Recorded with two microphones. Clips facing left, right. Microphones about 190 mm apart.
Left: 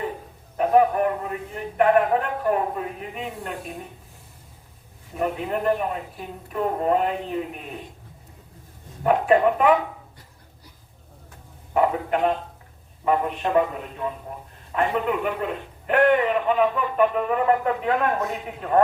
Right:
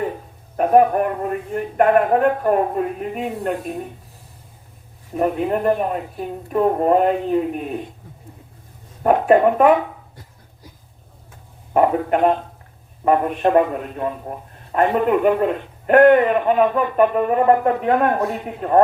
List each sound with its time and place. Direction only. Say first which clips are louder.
0.5 s speech: right 4 dB; 50° right (ahead or behind)
5.2 s speech: right 5 dB; 45° right (ahead or behind)
9.0 s speech: right 4 dB; 45° right (ahead or behind)
11.7 s a man's voice: right 5 dB; 50° right (ahead or behind)